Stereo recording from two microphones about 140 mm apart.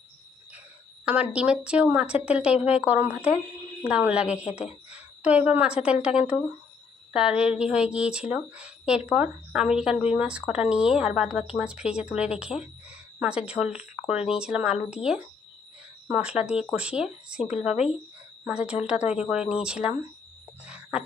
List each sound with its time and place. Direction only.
1.0 s speech: 10° right (ahead or behind)
4.4 s speech: 50° left (ahead or behind)
4.9 s speech: 10° right (ahead or behind)
20.7 s a sound: 10° right (ahead or behind)